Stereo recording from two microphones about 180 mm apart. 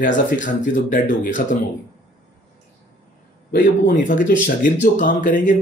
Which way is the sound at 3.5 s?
50° left (ahead or behind).